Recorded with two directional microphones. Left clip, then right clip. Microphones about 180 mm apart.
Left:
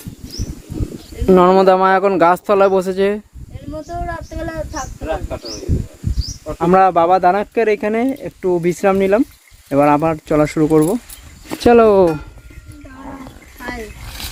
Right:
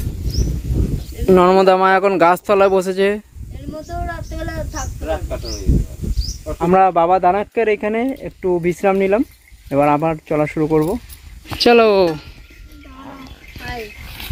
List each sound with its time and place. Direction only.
1.2 s speech: 5° left (ahead or behind)
3.8 s a sound: 50° left (ahead or behind)
6.6 s speech: 5° left (ahead or behind)